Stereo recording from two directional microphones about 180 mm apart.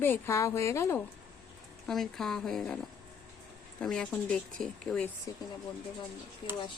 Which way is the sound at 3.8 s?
5° left (ahead or behind).